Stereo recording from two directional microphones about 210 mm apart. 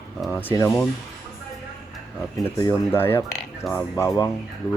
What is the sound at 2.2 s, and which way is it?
Speech, 10° left (ahead or behind).